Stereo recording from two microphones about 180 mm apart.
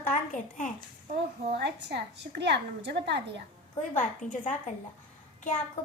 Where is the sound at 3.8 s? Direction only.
45° left (ahead or behind).